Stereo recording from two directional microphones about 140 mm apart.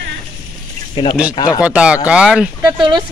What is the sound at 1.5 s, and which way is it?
Speech, 10° right (ahead or behind).